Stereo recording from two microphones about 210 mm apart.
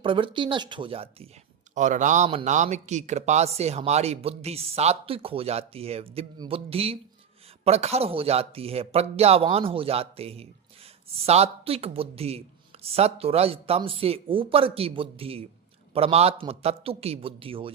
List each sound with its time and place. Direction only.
0.0 s speech: 25° right (ahead or behind)